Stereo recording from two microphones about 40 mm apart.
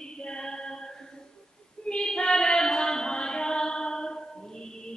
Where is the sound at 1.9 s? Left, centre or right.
Left.